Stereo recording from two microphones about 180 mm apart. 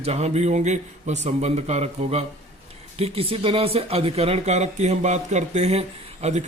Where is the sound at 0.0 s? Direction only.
35° right (ahead or behind).